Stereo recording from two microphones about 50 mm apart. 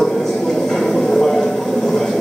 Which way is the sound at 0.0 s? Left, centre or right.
Centre.